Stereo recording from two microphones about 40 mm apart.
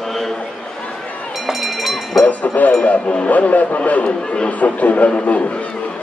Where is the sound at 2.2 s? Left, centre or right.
Left.